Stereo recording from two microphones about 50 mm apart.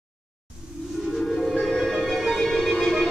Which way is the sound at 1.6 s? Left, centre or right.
Centre.